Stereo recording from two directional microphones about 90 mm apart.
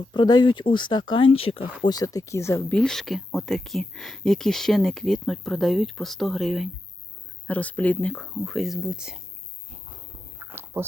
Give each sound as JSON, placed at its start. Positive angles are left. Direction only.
{"t": 0.1, "sound": "speech", "side_deg": 55}
{"t": 1.9, "sound": "speech", "side_deg": 40}
{"t": 2.6, "sound": "speech", "side_deg": 10}
{"t": 7.4, "sound": "speech", "side_deg": 15}
{"t": 10.3, "sound": "a sound", "side_deg": -25}